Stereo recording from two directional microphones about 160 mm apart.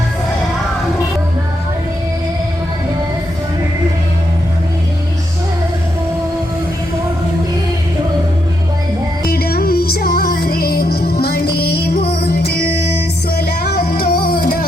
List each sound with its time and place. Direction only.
9.2 s music: 75° left (ahead or behind)